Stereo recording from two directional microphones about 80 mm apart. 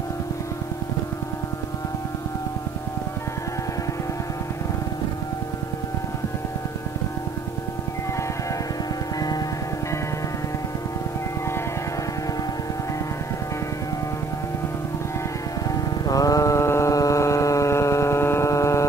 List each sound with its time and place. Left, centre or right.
15.7 s mantra: left